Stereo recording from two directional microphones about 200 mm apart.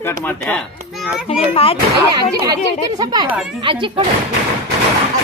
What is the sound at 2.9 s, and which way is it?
A child's voice, 20° right (ahead or behind).